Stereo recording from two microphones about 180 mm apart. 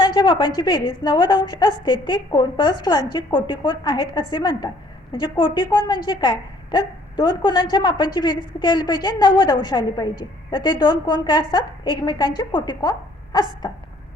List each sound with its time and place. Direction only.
0.0 s a woman's voice: 25° left (ahead or behind)